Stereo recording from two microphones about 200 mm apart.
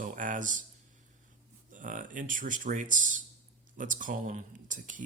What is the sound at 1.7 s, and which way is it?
Speech, 40° right (ahead or behind).